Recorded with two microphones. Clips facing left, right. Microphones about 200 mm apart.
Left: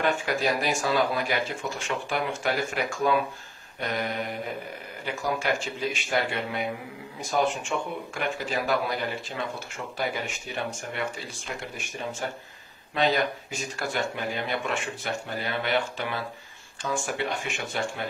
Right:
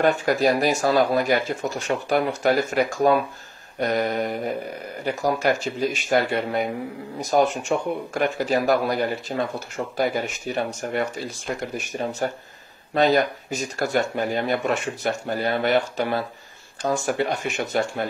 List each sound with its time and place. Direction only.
0.0 s speech: 40° right (ahead or behind)